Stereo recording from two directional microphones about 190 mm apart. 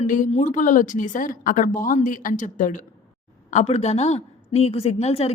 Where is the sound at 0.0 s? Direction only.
40° left (ahead or behind).